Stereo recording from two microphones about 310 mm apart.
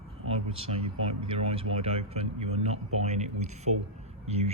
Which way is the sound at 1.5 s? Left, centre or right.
Centre.